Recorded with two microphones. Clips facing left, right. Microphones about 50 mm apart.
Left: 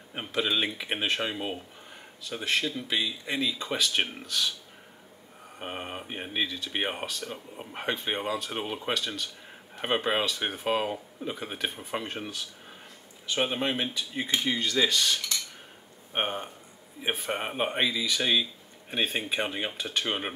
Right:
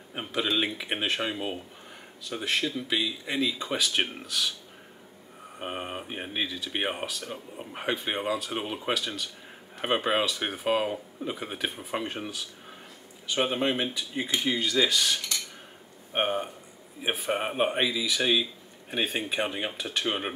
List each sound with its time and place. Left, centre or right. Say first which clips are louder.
0.1 s speech: even; centre
5.6 s speech: right 2 dB; centre